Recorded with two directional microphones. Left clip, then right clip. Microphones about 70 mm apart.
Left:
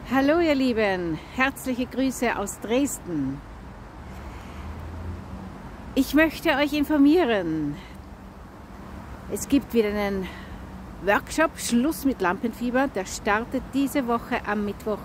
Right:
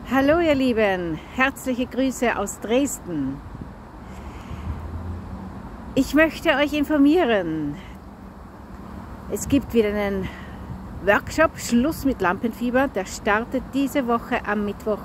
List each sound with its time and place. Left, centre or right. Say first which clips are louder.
0.1 s speech: right 3 dB; left
5.9 s speech: right 2 dB; left
9.3 s speech: right 2 dB; left